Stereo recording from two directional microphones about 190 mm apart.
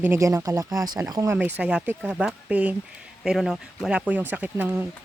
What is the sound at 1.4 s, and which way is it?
Speech, 5° right (ahead or behind).